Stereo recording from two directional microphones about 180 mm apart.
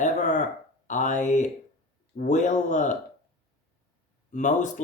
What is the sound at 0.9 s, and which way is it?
Speech, 45° left (ahead or behind).